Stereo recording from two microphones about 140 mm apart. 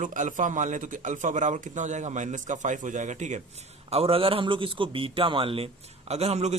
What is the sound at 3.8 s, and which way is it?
A man's voice, 45° right (ahead or behind).